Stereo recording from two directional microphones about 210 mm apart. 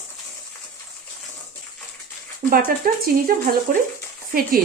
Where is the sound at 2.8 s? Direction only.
40° right (ahead or behind).